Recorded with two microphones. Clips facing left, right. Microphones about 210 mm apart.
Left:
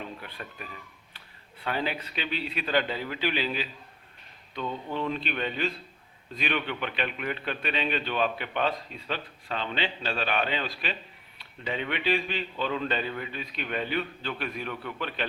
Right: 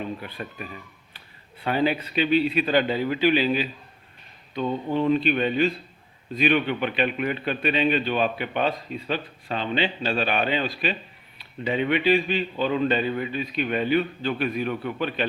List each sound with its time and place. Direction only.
0.2 s a man's voice: 15° right (ahead or behind)
4.5 s speech: 35° right (ahead or behind)
5.1 s a man's voice: 10° right (ahead or behind)